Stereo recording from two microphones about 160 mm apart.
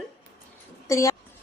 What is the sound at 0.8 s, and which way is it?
Speech, 20° left (ahead or behind).